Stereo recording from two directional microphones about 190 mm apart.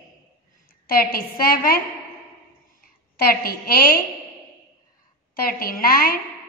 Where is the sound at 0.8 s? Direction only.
50° left (ahead or behind).